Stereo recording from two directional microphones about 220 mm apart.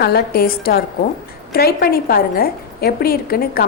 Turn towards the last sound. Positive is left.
turn(degrees=45)  # may be behind; listen again after turning